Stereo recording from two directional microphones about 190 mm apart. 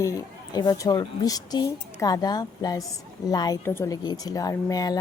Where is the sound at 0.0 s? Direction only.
20° left (ahead or behind).